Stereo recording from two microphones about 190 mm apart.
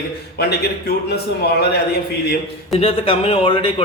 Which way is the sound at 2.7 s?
30° left (ahead or behind).